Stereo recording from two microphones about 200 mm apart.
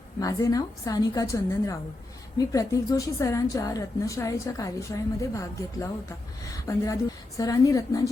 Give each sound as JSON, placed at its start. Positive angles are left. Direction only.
{"t": 0.2, "sound": "a woman's voice", "side_deg": 15}